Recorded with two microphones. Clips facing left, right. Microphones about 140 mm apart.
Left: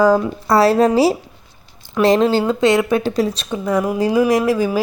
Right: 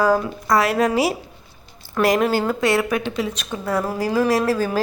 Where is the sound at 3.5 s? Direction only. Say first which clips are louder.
Left 4 dB; 15° left (ahead or behind).